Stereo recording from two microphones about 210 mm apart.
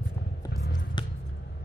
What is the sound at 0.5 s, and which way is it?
Music, 45° left (ahead or behind).